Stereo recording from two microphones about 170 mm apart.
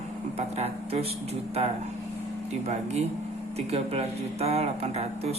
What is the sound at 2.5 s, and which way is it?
Speech, 40° right (ahead or behind).